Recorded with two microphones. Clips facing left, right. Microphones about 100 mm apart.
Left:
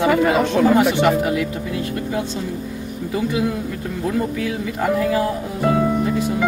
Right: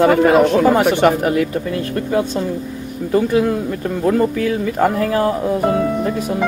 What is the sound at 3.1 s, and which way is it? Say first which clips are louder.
Speech: right 6 dB; 55° right (ahead or behind).